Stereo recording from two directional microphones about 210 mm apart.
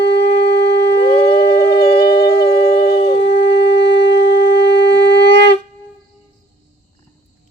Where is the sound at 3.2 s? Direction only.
55° left (ahead or behind).